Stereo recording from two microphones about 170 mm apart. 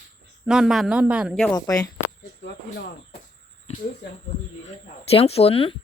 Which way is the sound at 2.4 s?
75° left (ahead or behind).